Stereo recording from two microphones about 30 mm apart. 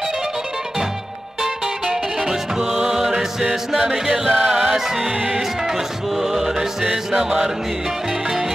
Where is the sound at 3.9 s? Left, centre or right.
Centre.